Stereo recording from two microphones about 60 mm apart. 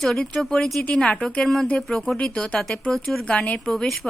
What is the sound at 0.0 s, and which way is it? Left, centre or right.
A woman's voice, centre.